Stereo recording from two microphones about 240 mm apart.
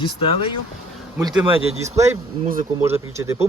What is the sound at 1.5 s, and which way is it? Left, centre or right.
Speech, right.